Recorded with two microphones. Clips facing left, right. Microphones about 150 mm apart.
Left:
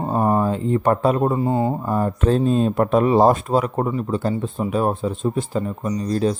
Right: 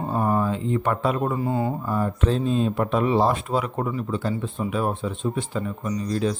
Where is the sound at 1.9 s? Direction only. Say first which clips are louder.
Left 4 dB; 45° left (ahead or behind).